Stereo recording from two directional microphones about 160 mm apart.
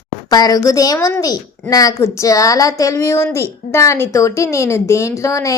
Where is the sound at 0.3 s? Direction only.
25° left (ahead or behind).